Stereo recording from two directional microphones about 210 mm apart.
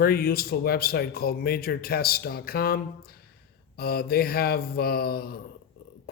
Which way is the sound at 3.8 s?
45° left (ahead or behind).